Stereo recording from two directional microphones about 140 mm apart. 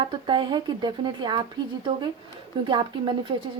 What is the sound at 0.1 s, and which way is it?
Speech, 35° right (ahead or behind).